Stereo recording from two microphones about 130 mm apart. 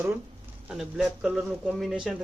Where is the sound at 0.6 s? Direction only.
5° right (ahead or behind).